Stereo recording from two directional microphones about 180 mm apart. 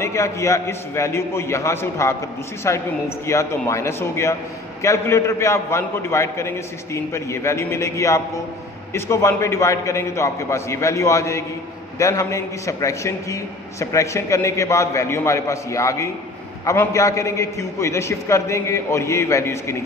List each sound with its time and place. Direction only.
0.0 s a man's voice: 15° left (ahead or behind)